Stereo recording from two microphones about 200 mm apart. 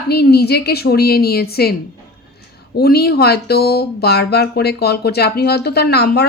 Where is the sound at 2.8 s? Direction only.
50° left (ahead or behind).